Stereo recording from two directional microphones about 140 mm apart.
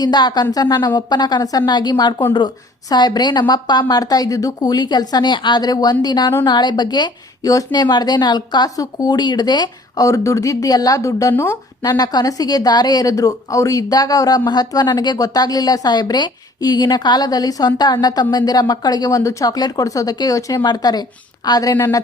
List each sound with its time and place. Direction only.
0.0 s a woman's voice: 30° left (ahead or behind)